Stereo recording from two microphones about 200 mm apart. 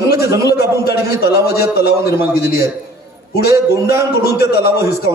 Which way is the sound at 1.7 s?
50° left (ahead or behind).